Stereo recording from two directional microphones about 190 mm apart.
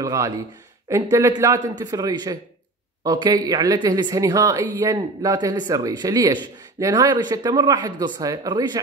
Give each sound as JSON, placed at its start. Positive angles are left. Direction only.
{"t": 0.0, "sound": "speech", "side_deg": -15}